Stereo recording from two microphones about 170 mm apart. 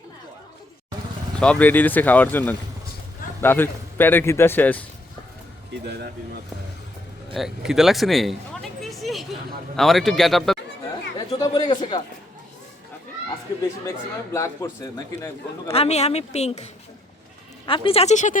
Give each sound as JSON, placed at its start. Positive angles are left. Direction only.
{"t": 1.4, "sound": "speech", "side_deg": 5}
{"t": 5.8, "sound": "speech", "side_deg": -75}
{"t": 7.3, "sound": "speech", "side_deg": 0}
{"t": 8.8, "sound": "a sound", "side_deg": 0}
{"t": 9.7, "sound": "speech", "side_deg": 0}
{"t": 11.3, "sound": "a sound", "side_deg": 25}
{"t": 14.3, "sound": "speech", "side_deg": 20}
{"t": 15.7, "sound": "speech", "side_deg": 40}
{"t": 17.7, "sound": "speech", "side_deg": 30}